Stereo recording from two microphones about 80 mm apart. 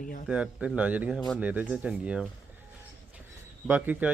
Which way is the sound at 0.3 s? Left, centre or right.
Centre.